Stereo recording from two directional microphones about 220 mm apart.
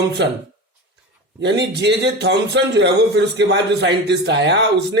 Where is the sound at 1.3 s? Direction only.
50° right (ahead or behind).